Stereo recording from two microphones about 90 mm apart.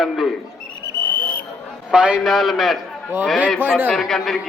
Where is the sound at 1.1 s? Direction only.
60° right (ahead or behind).